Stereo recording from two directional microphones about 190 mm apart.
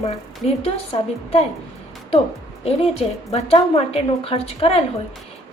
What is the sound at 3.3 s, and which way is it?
A woman's voice, 30° left (ahead or behind).